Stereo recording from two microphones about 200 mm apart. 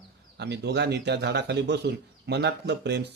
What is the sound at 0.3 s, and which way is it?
A man's voice, 60° right (ahead or behind).